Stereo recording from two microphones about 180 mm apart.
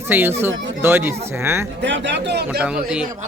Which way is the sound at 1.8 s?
85° right.